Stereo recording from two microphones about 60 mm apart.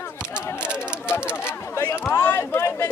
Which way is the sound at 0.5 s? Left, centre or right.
Centre.